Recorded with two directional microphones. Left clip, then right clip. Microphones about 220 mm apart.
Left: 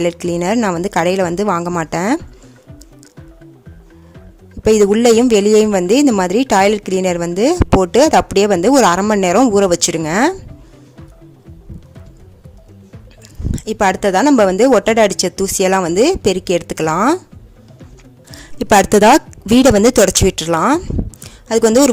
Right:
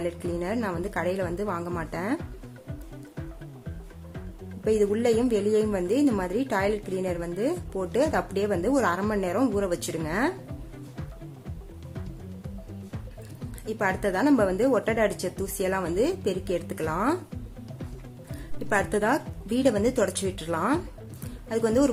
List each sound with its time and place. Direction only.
0.0 s speech: 45° left (ahead or behind)
4.6 s speech: 45° left (ahead or behind)
13.5 s speech: 45° left (ahead or behind)
18.6 s speech: 45° left (ahead or behind)